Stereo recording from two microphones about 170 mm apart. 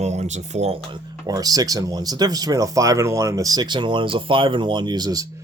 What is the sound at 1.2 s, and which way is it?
Speech, 20° right (ahead or behind).